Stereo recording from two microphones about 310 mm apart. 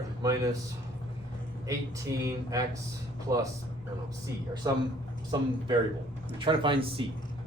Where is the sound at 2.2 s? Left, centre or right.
Centre.